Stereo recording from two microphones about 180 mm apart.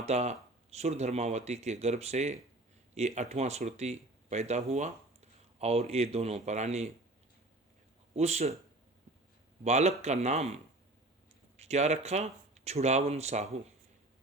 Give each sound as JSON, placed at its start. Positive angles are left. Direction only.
{"t": 0.0, "sound": "speech", "side_deg": -40}
{"t": 8.1, "sound": "speech", "side_deg": -35}
{"t": 9.6, "sound": "speech", "side_deg": -40}